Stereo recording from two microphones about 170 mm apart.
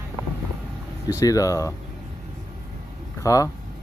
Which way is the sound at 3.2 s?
20° left (ahead or behind).